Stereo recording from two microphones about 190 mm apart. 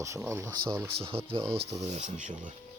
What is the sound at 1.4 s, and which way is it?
Speech, 30° right (ahead or behind).